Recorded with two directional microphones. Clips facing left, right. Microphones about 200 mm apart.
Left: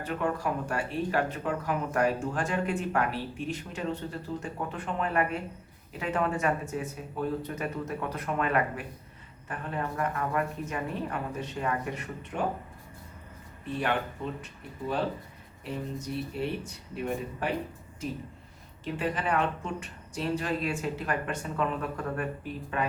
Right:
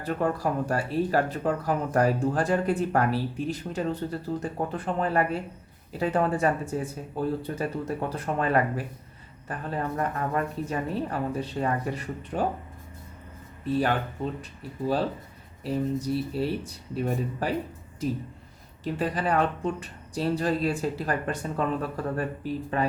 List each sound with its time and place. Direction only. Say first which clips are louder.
0.0 s speech: right 3 dB; 35° right (ahead or behind)
13.7 s speech: right 6 dB; 35° right (ahead or behind)
15.6 s speech: right 8 dB; 35° right (ahead or behind)
18.9 s speech: right 3 dB; 35° right (ahead or behind)